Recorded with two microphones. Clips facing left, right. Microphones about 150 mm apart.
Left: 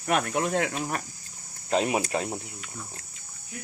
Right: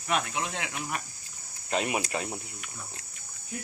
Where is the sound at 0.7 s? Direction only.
35° left (ahead or behind).